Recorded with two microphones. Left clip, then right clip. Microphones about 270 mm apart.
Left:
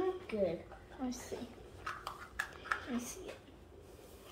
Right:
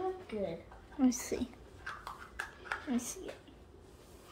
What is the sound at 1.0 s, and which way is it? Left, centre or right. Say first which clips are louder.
Speech: right 11 dB; right.